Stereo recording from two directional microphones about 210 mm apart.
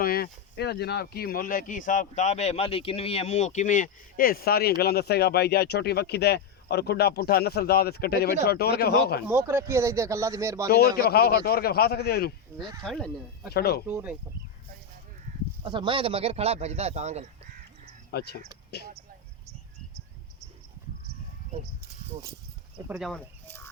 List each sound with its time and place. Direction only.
0.0 s speech: 45° left (ahead or behind)
9.2 s speech: 10° right (ahead or behind)
10.7 s speech: 50° left (ahead or behind)
12.5 s speech: 20° right (ahead or behind)
12.8 s speech: 5° left (ahead or behind)
13.5 s speech: 50° left (ahead or behind)
13.8 s speech: 10° right (ahead or behind)
15.6 s speech: 25° right (ahead or behind)
18.1 s speech: 50° left (ahead or behind)
22.9 s speech: centre (ahead or behind)